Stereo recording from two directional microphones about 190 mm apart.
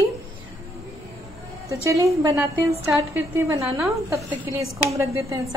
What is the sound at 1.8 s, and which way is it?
A woman's voice, 15° right (ahead or behind).